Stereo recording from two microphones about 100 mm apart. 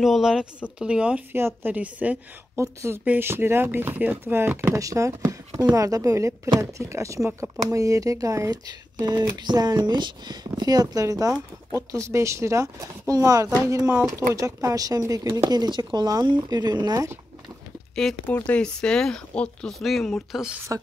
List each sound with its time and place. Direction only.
0.0 s speech: 5° right (ahead or behind)
1.3 s speech: 20° right (ahead or behind)
2.6 s speech: 30° right (ahead or behind)
4.7 s speech: 30° right (ahead or behind)
7.7 s speech: 35° right (ahead or behind)
18.0 s speech: 5° left (ahead or behind)